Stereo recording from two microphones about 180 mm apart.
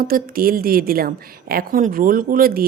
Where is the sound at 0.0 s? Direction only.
55° right (ahead or behind).